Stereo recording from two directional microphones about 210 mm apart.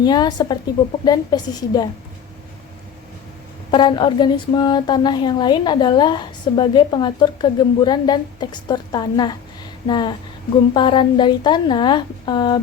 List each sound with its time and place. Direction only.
0.0 s a woman's voice: 20° left (ahead or behind)
3.7 s a woman's voice: 20° left (ahead or behind)